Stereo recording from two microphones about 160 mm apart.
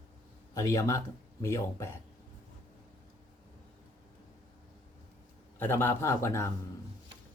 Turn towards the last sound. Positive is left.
turn(degrees=15)  # may be behind; listen again after turning